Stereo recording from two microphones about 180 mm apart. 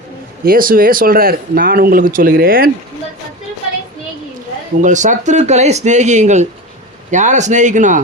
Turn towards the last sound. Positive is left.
turn(degrees=-45)  # may be behind; listen again after turning